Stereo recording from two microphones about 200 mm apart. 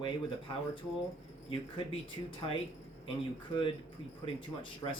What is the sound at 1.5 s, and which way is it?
Speech, 25° left (ahead or behind).